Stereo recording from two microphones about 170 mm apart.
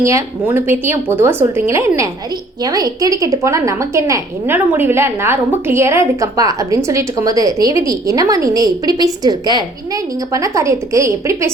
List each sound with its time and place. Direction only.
0.0 s a woman's voice: 15° right (ahead or behind)